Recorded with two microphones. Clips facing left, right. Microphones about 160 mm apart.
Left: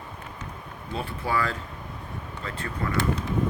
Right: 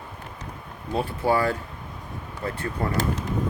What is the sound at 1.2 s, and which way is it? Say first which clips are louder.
Speech: right 6 dB; 75° right (ahead or behind).